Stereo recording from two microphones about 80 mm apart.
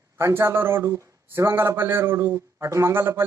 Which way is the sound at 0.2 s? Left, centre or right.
Right.